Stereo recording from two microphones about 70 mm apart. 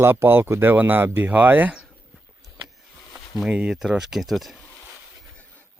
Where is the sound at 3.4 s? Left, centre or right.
Centre.